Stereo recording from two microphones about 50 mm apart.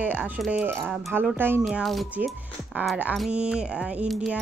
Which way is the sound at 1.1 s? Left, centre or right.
Right.